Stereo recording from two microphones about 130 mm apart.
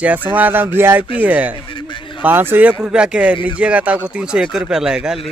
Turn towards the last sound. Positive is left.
turn(degrees=-5)  # may be behind; listen again after turning